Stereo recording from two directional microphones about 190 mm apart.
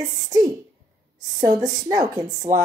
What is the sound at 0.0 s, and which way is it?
Speech, 20° right (ahead or behind).